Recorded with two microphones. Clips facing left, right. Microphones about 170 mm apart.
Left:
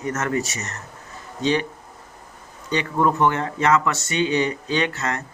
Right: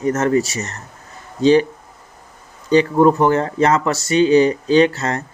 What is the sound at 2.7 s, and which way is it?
Speech, 35° right (ahead or behind).